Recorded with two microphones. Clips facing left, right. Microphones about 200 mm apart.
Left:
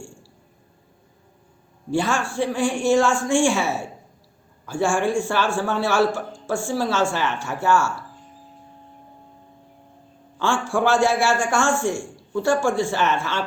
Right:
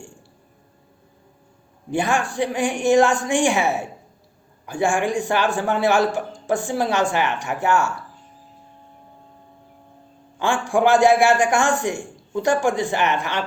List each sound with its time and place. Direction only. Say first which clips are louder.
1.9 s a man's voice: right 1 dB; 15° right (ahead or behind)
10.3 s a man's voice: right 2 dB; 15° right (ahead or behind)